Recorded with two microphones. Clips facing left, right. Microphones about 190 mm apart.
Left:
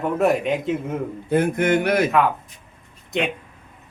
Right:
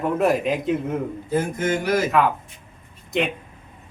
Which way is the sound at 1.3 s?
65° left (ahead or behind).